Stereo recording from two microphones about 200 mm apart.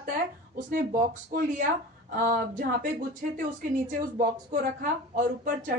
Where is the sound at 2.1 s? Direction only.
45° right (ahead or behind).